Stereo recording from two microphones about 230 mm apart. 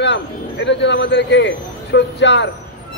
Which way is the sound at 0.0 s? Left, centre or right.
Left.